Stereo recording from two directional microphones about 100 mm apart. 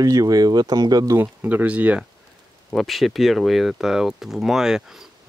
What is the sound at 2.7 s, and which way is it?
Speech, centre (ahead or behind).